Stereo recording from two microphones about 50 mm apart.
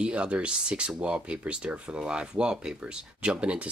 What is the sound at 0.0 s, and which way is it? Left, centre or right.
Speech, right.